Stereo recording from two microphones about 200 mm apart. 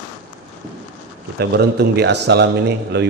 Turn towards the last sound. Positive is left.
turn(degrees=-55)  # may be behind; listen again after turning